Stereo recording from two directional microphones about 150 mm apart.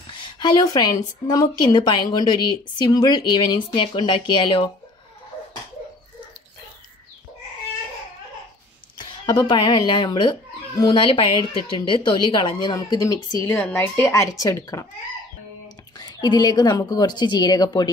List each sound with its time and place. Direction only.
0.2 s a woman's voice: 30° left (ahead or behind)
8.9 s a woman's voice: 30° left (ahead or behind)
16.0 s speech: 25° left (ahead or behind)